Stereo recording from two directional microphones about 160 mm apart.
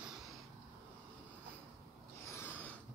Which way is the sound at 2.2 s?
15° left (ahead or behind).